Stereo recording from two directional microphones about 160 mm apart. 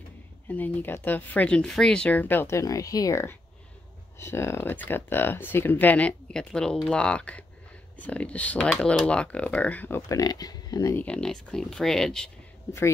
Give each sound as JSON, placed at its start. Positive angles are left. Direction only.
{"t": 0.5, "sound": "speech", "side_deg": 10}
{"t": 11.1, "sound": "speech", "side_deg": 5}